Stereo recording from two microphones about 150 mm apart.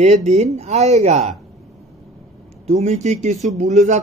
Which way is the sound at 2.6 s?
50° right (ahead or behind).